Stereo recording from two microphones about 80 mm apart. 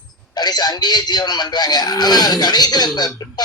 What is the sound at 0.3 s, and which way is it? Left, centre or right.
Speech, left.